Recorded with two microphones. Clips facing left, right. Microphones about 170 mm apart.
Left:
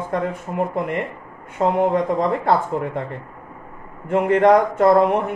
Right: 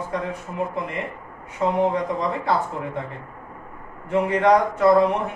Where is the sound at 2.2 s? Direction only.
55° left (ahead or behind).